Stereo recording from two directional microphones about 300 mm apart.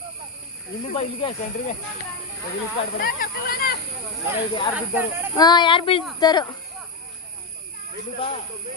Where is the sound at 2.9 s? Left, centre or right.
Left.